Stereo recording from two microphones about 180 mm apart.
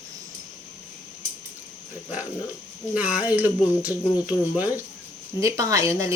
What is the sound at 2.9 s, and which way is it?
Speech, 10° right (ahead or behind).